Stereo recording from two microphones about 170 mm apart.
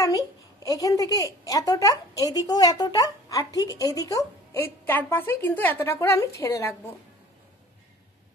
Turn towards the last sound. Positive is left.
turn(degrees=15)  # may be behind; listen again after turning